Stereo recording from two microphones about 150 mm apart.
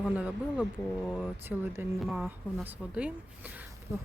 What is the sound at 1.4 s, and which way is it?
Speech, 15° right (ahead or behind).